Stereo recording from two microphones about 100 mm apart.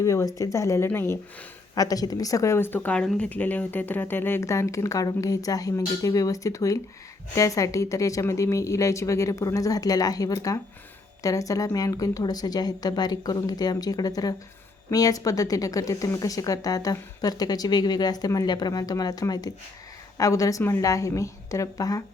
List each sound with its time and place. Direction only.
0.0 s a woman's voice: 30° left (ahead or behind)
1.7 s a woman's voice: 40° left (ahead or behind)